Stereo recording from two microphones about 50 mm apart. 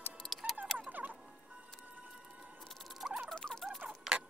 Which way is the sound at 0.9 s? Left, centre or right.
Right.